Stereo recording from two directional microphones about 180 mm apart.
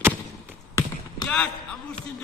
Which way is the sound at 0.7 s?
20° left (ahead or behind).